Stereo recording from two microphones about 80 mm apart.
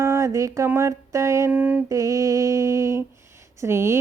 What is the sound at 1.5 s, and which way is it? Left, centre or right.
Speech, centre.